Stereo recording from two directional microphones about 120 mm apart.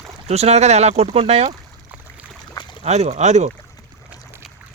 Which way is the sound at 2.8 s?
65° right (ahead or behind).